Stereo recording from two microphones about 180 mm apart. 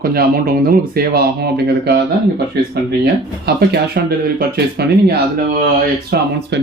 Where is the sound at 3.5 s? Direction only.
65° right (ahead or behind).